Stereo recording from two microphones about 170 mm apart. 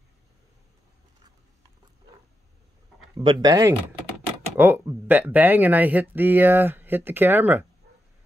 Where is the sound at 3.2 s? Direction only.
25° right (ahead or behind); by 7.6 s 10° right (ahead or behind).